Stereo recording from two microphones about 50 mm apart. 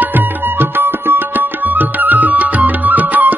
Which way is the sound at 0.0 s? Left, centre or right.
Right.